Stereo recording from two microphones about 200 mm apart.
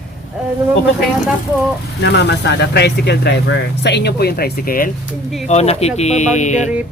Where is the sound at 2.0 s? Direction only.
55° left (ahead or behind).